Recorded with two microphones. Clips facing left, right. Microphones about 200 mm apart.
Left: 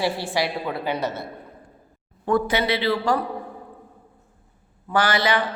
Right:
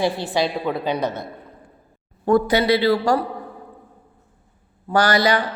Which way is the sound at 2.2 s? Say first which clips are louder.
Right 5 dB; 40° right (ahead or behind).